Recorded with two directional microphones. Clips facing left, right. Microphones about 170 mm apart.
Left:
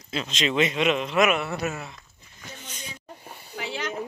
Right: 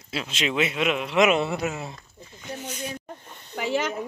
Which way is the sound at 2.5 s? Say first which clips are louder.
Right 9 dB; 60° right (ahead or behind).